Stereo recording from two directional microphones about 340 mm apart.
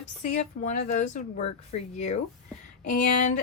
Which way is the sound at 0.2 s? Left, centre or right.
Left.